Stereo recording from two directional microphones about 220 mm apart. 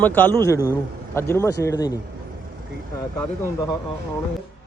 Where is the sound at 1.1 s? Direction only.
10° left (ahead or behind).